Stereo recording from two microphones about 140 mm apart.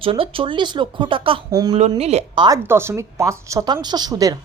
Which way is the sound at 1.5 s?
30° right (ahead or behind).